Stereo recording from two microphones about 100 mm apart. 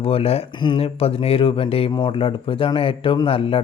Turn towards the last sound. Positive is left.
turn(degrees=65)  # may be behind; listen again after turning